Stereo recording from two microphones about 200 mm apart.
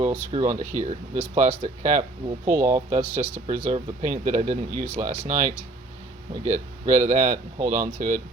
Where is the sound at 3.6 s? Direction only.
40° right (ahead or behind).